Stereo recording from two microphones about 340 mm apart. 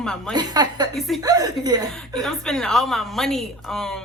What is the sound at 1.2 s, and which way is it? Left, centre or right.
Speech, centre.